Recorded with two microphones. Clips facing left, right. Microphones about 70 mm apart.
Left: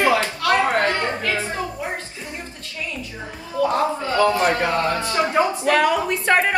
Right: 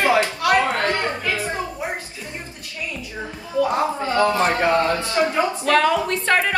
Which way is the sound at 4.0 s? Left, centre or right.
Right.